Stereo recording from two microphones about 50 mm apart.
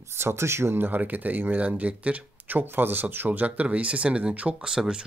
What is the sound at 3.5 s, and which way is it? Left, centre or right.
Speech, right.